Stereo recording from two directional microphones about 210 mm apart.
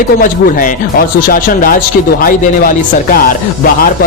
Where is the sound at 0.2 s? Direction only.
40° left (ahead or behind).